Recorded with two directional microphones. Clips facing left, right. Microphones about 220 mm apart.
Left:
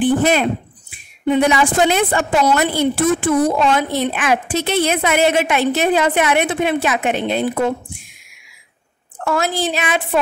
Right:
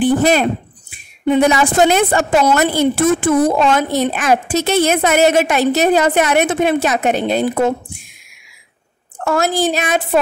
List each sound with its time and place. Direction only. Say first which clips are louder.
0.0 s a woman's voice: right 2 dB; 40° right (ahead or behind)
9.2 s a woman's voice: right 3 dB; 45° right (ahead or behind)